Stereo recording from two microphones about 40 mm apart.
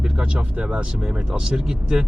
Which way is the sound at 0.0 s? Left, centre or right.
Centre.